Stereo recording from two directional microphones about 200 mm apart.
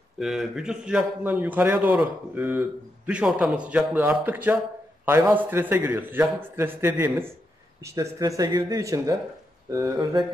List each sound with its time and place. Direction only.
0.2 s a man's voice: centre (ahead or behind); by 10.2 s 15° right (ahead or behind)